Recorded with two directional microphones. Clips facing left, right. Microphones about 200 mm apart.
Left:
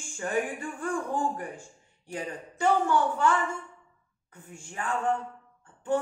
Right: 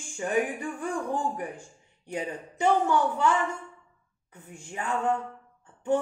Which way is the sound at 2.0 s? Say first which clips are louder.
Right 3 dB; 20° right (ahead or behind).